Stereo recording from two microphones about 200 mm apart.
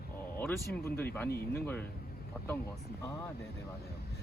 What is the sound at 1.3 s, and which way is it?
Speech, 50° left (ahead or behind).